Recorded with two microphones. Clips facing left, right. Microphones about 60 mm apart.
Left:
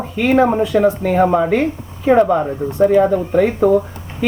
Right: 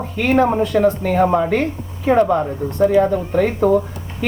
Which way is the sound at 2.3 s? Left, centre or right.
Centre.